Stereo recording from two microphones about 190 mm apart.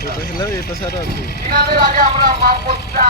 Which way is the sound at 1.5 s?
50° right (ahead or behind).